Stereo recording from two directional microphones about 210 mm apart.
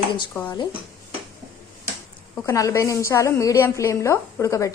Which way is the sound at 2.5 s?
15° left (ahead or behind).